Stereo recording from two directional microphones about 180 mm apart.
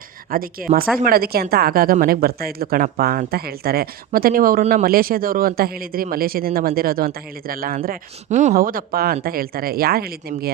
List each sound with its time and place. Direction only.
0.3 s speech: 55° right (ahead or behind)
7.9 s speech: 40° right (ahead or behind); by 10.5 s 60° right (ahead or behind)